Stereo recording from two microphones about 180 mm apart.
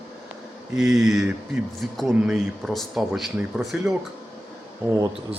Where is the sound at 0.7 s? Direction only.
5° right (ahead or behind).